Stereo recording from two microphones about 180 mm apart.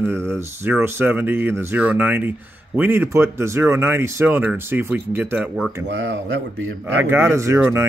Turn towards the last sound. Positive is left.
turn(degrees=-15)  # may be behind; listen again after turning